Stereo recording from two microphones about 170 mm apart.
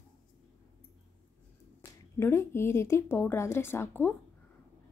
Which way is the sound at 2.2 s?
15° left (ahead or behind).